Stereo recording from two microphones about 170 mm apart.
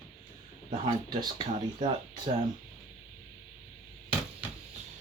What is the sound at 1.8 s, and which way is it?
Speech, 25° right (ahead or behind).